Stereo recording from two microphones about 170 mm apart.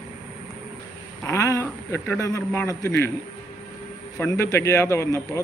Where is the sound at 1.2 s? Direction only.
20° left (ahead or behind).